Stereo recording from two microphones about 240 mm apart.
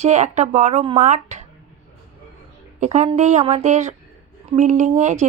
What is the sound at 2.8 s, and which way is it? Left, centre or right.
Speech, right.